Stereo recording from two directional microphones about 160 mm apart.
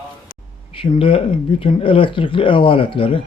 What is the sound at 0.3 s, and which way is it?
Speech, 35° left (ahead or behind).